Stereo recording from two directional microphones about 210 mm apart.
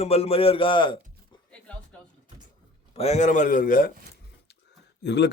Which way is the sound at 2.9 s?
30° left (ahead or behind).